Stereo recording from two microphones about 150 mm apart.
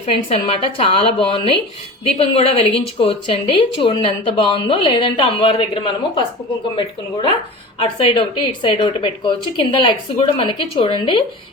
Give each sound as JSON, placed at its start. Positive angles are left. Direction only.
{"t": 0.0, "sound": "speech", "side_deg": 40}
{"t": 7.8, "sound": "speech", "side_deg": 35}